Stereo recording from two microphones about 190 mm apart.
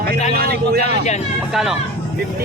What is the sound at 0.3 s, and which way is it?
Speech, 55° right (ahead or behind).